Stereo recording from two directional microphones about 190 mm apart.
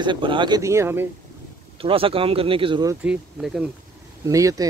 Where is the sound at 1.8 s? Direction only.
30° right (ahead or behind).